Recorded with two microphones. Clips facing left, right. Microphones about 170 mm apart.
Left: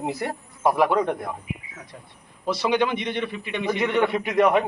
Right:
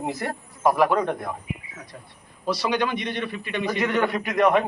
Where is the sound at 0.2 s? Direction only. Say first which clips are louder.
Even; centre (ahead or behind).